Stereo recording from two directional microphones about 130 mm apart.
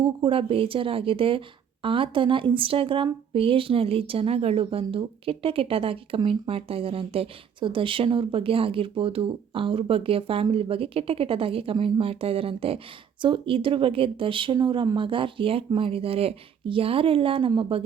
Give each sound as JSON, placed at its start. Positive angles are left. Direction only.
{"t": 0.0, "sound": "a woman's voice", "side_deg": -40}